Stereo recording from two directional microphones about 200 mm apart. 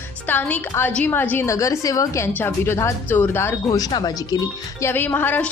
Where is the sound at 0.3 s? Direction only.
10° left (ahead or behind).